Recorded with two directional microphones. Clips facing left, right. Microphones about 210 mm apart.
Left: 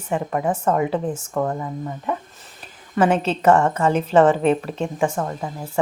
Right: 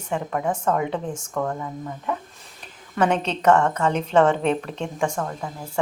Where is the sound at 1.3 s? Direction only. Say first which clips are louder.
Left 2 dB; 20° left (ahead or behind).